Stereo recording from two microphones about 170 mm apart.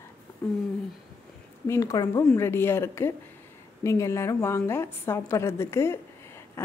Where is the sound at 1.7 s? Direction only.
20° left (ahead or behind).